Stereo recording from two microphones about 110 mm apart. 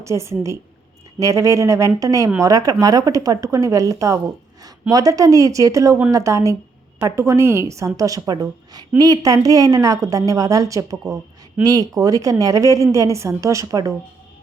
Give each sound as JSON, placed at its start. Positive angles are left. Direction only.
{"t": 0.0, "sound": "a woman's voice", "side_deg": -25}